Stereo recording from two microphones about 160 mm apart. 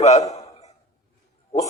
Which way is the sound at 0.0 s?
45° left (ahead or behind).